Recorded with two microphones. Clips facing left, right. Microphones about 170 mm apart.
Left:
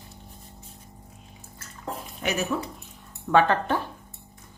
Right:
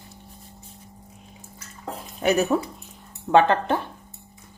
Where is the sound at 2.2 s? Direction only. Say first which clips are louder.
Right 8 dB; 40° right (ahead or behind).